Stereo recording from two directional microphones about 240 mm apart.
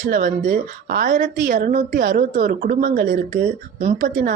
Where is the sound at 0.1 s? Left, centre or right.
Right.